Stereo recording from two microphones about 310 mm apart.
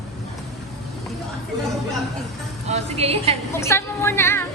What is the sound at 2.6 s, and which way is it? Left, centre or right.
Speech, centre.